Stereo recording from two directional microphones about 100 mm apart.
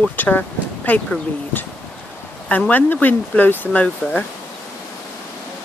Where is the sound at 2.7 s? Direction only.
15° left (ahead or behind).